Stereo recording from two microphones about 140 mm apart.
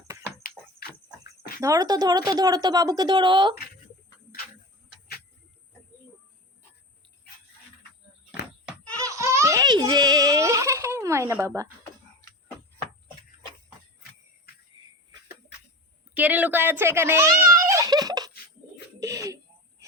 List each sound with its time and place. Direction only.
0.4 s a sound: 90° left
1.4 s a woman's voice: 25° right (ahead or behind)
9.0 s baby laughter: 20° right (ahead or behind)
14.8 s cough: 35° right (ahead or behind)
16.1 s a child's voice: 10° right (ahead or behind)
17.7 s giggle: 25° right (ahead or behind)
18.9 s bird: 25° right (ahead or behind)